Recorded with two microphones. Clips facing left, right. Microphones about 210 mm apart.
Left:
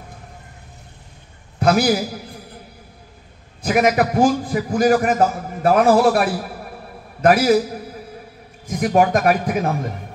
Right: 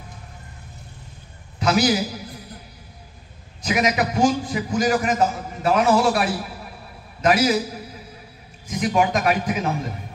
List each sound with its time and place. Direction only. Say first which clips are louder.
1.6 s a sound: left 3 dB; 55° left (ahead or behind)
3.6 s a man's voice: left 5 dB; 50° left (ahead or behind)
8.6 s a man's voice: left 4 dB; 55° left (ahead or behind)